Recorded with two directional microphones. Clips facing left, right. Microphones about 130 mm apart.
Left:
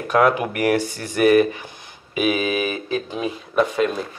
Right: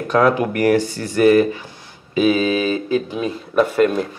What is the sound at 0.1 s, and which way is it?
Speech, 15° left (ahead or behind).